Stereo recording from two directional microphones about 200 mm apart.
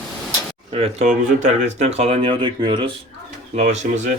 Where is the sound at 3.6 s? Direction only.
35° right (ahead or behind).